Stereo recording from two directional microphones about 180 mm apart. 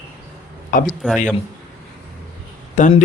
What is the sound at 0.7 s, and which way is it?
Speech, 50° left (ahead or behind).